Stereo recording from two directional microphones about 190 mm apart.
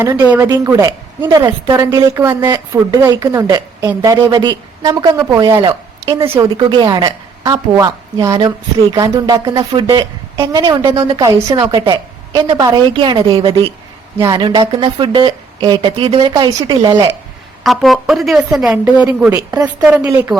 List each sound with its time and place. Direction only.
0.0 s a woman's voice: 10° right (ahead or behind)
17.6 s a woman's voice: centre (ahead or behind)